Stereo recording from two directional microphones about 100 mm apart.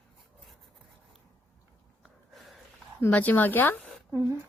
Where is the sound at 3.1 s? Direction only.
15° left (ahead or behind).